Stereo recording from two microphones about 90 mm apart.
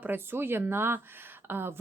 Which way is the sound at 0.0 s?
25° right (ahead or behind).